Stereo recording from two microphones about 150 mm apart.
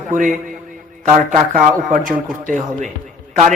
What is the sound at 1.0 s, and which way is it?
A man's voice, 50° right (ahead or behind).